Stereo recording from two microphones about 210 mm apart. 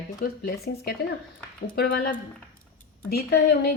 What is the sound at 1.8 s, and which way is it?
Speech, 45° left (ahead or behind).